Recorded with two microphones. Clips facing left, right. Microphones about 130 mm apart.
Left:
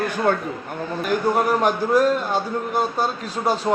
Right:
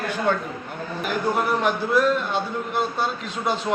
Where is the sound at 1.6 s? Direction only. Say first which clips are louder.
Left 3 dB; 40° left (ahead or behind).